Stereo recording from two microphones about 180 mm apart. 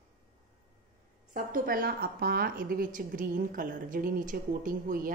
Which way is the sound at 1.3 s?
50° right (ahead or behind).